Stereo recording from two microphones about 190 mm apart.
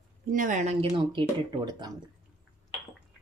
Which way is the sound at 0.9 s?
25° right (ahead or behind).